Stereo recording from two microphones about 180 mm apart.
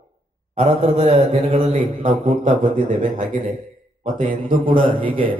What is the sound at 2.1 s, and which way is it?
A man's voice, 35° right (ahead or behind).